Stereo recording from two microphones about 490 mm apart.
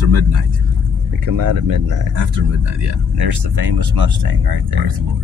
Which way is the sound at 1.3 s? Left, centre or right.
Right.